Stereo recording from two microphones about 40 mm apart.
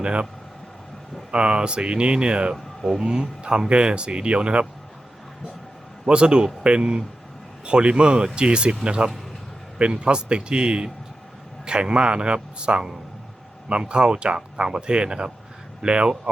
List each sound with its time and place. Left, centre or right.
0.0 s speech: right
1.3 s speech: right
6.1 s speech: right